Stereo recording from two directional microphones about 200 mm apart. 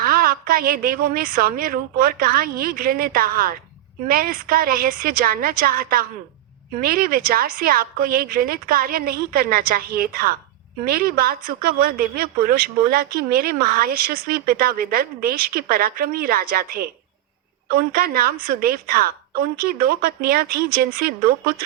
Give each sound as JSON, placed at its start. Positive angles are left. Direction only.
{"t": 0.0, "sound": "a woman's voice", "side_deg": -45}